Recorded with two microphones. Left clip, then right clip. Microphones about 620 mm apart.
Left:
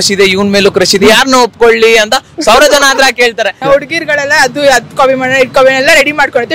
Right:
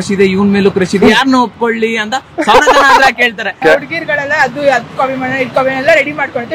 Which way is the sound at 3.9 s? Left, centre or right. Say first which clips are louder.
Left 4 dB; left.